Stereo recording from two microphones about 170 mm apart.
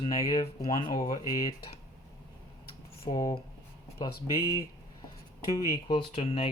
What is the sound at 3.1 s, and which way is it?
Speech, 20° left (ahead or behind).